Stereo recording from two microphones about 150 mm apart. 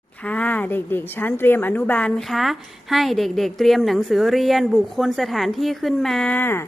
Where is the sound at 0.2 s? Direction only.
10° left (ahead or behind).